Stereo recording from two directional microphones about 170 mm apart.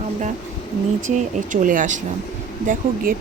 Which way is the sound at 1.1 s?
50° right (ahead or behind).